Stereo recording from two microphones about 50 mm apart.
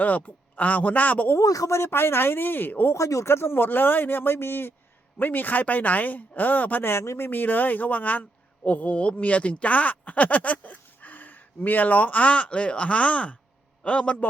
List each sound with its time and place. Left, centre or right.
0.0 s speech: left
1.4 s speech: left
2.9 s speech: left
3.2 s speech: left
6.9 s speech: left
7.3 s a man's voice: left